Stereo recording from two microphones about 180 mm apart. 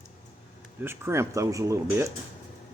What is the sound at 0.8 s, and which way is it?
Speech, 15° right (ahead or behind).